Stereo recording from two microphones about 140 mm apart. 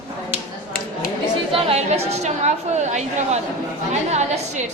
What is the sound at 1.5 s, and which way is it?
A woman's voice, 45° right (ahead or behind).